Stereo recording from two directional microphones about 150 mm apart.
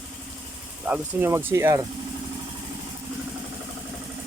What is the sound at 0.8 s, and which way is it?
Speech, 10° right (ahead or behind).